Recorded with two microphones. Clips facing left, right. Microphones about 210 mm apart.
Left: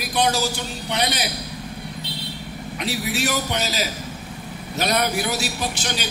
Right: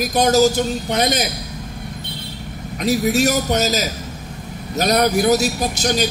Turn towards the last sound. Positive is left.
turn(degrees=-40)  # may be behind; listen again after turning